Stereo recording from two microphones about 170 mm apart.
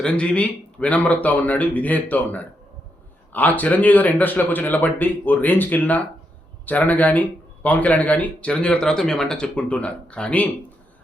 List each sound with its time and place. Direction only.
0.0 s speech: 5° left (ahead or behind)